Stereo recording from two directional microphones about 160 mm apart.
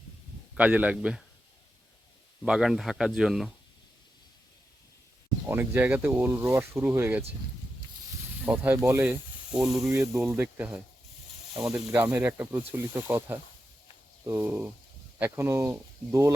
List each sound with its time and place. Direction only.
0.5 s speech: 10° right (ahead or behind)
2.4 s speech: 5° right (ahead or behind)
5.5 s speech: 15° right (ahead or behind)
8.4 s speech: 10° right (ahead or behind)
11.9 s speech: 10° right (ahead or behind)